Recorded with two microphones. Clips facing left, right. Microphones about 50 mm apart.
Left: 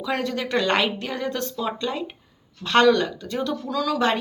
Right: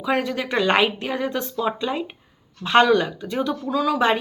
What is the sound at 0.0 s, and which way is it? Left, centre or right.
Speech, centre.